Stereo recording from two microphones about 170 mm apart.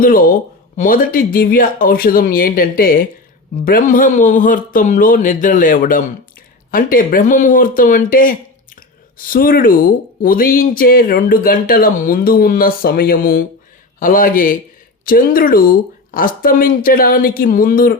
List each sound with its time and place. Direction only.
0.0 s speech: 55° left (ahead or behind)